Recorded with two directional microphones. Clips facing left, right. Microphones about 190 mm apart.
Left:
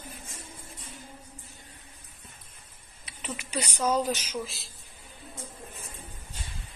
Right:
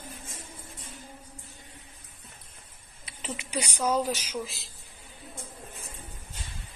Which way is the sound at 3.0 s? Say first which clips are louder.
Right 1 dB; 30° right (ahead or behind).